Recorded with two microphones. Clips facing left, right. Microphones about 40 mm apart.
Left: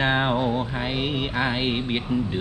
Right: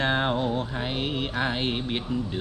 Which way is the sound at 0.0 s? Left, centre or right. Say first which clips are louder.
Left 3 dB; centre.